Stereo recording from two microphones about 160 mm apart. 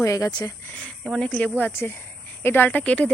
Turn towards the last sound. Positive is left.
turn(degrees=10)  # may be behind; listen again after turning